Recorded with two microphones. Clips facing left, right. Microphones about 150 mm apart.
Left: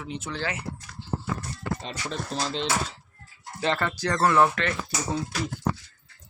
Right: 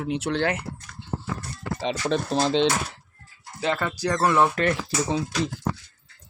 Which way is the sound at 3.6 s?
10° right (ahead or behind).